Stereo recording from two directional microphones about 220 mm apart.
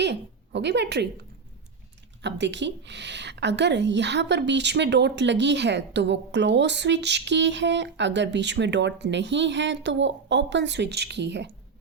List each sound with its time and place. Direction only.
0.0 s a woman's voice: 50° right (ahead or behind)
2.2 s a woman's voice: 55° right (ahead or behind)